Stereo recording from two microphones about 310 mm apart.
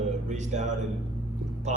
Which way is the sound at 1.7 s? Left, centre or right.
Right.